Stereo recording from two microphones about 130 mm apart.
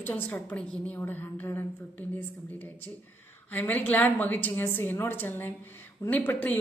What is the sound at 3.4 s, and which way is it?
A woman's voice, 15° left (ahead or behind).